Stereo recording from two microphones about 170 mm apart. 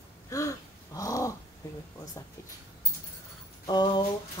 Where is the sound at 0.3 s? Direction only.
20° left (ahead or behind).